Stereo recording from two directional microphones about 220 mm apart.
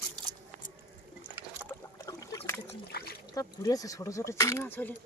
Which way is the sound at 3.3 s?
15° left (ahead or behind).